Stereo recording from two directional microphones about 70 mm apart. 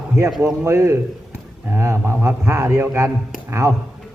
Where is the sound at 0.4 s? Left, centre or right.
Right.